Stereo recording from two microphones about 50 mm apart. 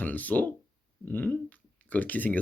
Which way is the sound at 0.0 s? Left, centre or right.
Left.